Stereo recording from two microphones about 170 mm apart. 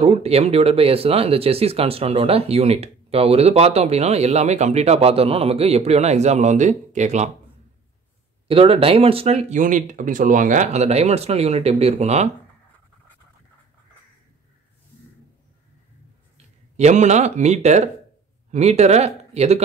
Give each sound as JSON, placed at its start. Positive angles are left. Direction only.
{"t": 0.0, "sound": "speech", "side_deg": -35}
{"t": 8.5, "sound": "speech", "side_deg": -35}
{"t": 16.7, "sound": "speech", "side_deg": -45}